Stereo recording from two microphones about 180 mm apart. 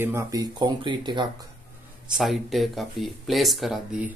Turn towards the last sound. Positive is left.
turn(degrees=-5)  # may be behind; listen again after turning